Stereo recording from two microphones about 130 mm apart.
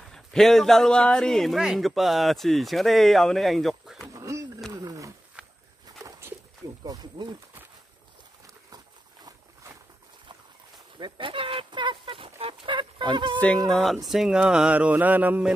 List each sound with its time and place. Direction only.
0.1 s a man's voice: 5° left (ahead or behind)
4.1 s a sound: 25° right (ahead or behind)
4.7 s roaring cats: 25° right (ahead or behind)
6.8 s speech: 30° right (ahead or behind)
8.7 s a sound: 25° right (ahead or behind)
11.0 s fowl: 40° right (ahead or behind)
13.7 s a man's voice: centre (ahead or behind)